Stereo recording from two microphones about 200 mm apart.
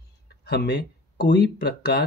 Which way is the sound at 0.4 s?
55° left (ahead or behind).